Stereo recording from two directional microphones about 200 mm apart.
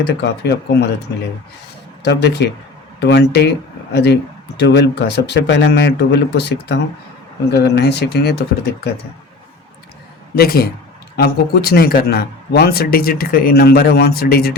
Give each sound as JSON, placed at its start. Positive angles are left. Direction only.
{"t": 0.2, "sound": "speech", "side_deg": 55}
{"t": 2.0, "sound": "speech", "side_deg": 55}
{"t": 10.3, "sound": "speech", "side_deg": 50}